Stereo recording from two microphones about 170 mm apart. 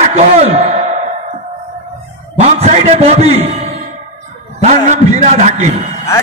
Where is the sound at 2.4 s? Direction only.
40° right (ahead or behind).